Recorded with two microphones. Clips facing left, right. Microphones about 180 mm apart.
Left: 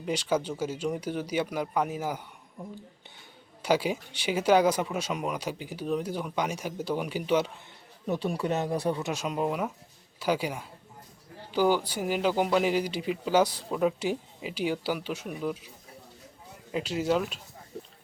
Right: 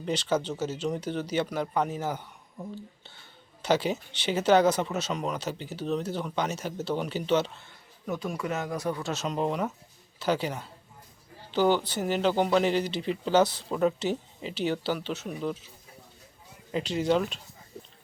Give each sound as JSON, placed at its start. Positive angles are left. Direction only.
{"t": 0.0, "sound": "speech", "side_deg": 10}
{"t": 3.6, "sound": "speech", "side_deg": 10}
{"t": 8.0, "sound": "speech", "side_deg": 35}
{"t": 9.0, "sound": "speech", "side_deg": 10}
{"t": 16.7, "sound": "speech", "side_deg": 5}